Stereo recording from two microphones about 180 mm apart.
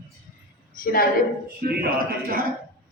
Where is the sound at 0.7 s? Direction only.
55° left (ahead or behind).